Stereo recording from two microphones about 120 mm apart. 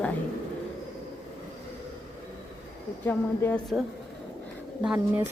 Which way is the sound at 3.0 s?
15° left (ahead or behind).